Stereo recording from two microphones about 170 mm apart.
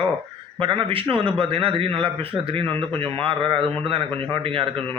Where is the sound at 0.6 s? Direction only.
30° right (ahead or behind).